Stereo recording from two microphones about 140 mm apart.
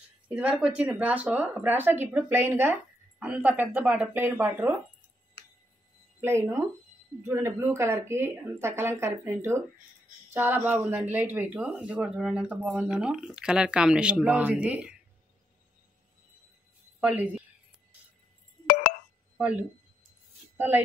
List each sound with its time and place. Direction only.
0.3 s speech: 10° right (ahead or behind)
6.2 s speech: 20° right (ahead or behind)
17.0 s a woman's voice: 10° right (ahead or behind)
18.7 s telephone dialing: 90° left
19.3 s a sound: 10° right (ahead or behind)
20.5 s speech: 15° right (ahead or behind)